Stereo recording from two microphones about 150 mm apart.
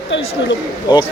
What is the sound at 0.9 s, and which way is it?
Speech, 30° left (ahead or behind).